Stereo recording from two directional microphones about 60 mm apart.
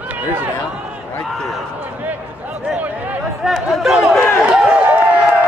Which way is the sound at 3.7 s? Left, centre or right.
Centre.